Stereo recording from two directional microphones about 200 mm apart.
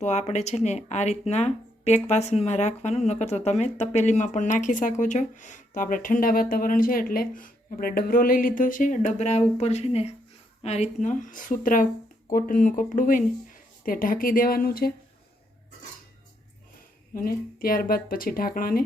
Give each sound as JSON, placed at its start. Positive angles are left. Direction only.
{"t": 0.0, "sound": "speech", "side_deg": 35}
{"t": 17.2, "sound": "speech", "side_deg": 45}